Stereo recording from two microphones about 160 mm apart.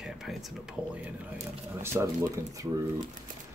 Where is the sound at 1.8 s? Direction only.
15° right (ahead or behind).